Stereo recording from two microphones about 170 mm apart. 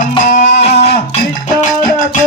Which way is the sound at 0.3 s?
40° left (ahead or behind).